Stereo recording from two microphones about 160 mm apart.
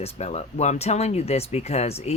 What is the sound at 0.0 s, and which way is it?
Speech, 40° left (ahead or behind).